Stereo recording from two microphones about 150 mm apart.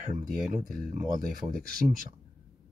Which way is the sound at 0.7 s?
75° right (ahead or behind).